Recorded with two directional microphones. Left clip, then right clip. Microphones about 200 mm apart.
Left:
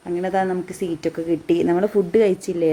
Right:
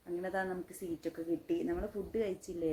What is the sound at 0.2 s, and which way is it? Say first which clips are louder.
Speech: left 16 dB; 5° left (ahead or behind).